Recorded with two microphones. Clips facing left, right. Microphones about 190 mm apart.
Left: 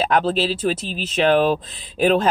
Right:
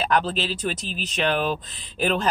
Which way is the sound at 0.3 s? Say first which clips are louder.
Left 7 dB; 40° left (ahead or behind).